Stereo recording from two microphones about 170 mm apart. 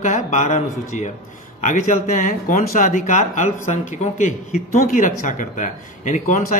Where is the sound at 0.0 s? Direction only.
45° left (ahead or behind).